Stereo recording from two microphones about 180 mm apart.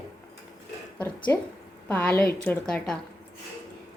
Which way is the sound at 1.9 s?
10° left (ahead or behind).